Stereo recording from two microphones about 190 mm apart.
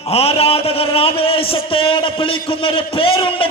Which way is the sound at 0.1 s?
30° left (ahead or behind).